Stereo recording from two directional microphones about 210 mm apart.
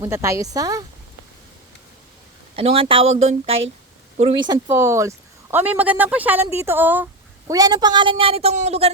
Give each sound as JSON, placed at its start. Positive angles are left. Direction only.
{"t": 0.0, "sound": "speech", "side_deg": -15}
{"t": 2.6, "sound": "speech", "side_deg": -30}
{"t": 4.4, "sound": "speech", "side_deg": -15}